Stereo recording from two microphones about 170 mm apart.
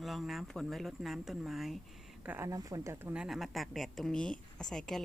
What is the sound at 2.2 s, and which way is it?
A woman's voice, 15° right (ahead or behind).